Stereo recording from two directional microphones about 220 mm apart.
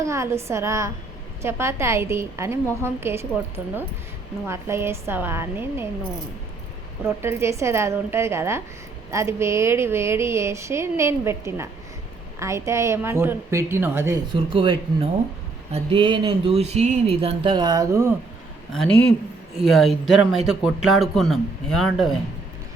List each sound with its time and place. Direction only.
0.0 s speech: 15° right (ahead or behind)
7.0 s speech: 10° right (ahead or behind)
14.3 s speech: 25° right (ahead or behind)
18.7 s speech: 5° left (ahead or behind)